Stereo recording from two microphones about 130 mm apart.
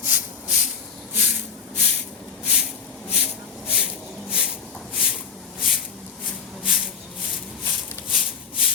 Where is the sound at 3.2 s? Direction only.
5° right (ahead or behind).